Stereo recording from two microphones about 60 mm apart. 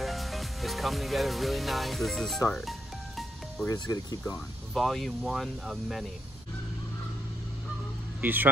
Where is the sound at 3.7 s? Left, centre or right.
Left.